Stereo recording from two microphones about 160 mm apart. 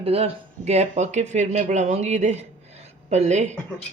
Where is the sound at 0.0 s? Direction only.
40° right (ahead or behind).